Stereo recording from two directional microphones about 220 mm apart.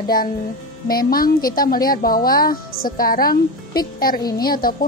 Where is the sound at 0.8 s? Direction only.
40° left (ahead or behind).